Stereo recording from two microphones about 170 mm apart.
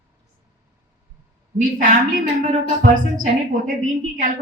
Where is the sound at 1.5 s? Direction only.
50° right (ahead or behind).